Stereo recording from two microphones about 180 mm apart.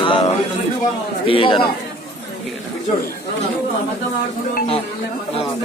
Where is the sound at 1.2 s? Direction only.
30° left (ahead or behind).